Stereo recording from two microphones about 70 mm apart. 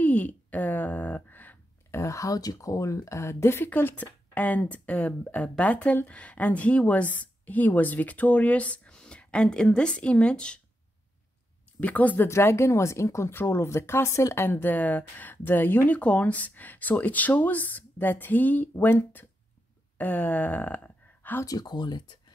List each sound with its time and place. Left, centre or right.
0.0 s a sound: left
1.9 s a woman's voice: left; by 10.6 s centre
11.8 s a woman's voice: left
12.3 s a woman's voice: left
21.5 s speech: left